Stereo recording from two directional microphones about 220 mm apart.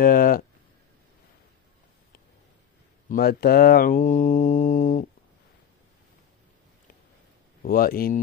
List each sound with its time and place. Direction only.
0.0 s speech: 40° left (ahead or behind)
3.1 s speech: 45° left (ahead or behind)
7.6 s speech: 40° left (ahead or behind)